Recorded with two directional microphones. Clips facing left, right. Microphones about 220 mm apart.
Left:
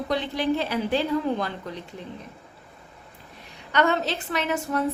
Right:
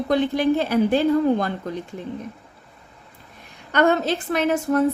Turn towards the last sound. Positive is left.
turn(degrees=-50)  # may be behind; listen again after turning